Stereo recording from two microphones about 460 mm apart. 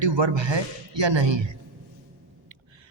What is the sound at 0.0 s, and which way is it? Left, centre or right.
A man's voice, right.